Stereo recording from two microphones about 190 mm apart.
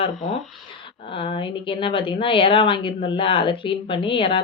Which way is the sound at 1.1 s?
25° left (ahead or behind).